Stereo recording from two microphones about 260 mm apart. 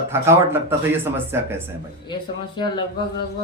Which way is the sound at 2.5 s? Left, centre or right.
Centre.